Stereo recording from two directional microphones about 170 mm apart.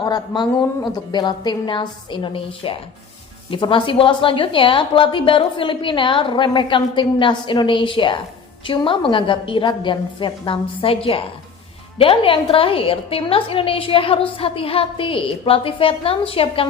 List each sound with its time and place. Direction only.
0.0 s a woman's voice: 25° left (ahead or behind)